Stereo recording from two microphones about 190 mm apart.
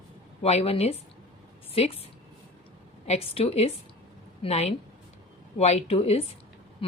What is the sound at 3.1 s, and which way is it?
A woman's voice, 30° left (ahead or behind).